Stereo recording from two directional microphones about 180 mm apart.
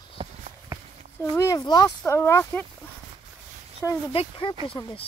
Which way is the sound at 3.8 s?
15° left (ahead or behind).